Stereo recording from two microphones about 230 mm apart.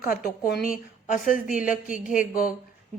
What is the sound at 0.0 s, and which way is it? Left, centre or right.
A woman's voice, left.